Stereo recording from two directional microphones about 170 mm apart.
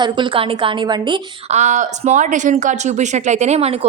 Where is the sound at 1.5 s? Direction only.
40° right (ahead or behind).